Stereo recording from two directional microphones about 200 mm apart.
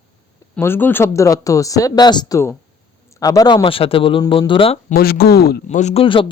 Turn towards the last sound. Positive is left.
turn(degrees=25)  # may be behind; listen again after turning